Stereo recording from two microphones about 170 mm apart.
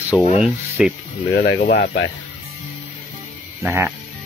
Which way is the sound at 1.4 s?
55° left (ahead or behind).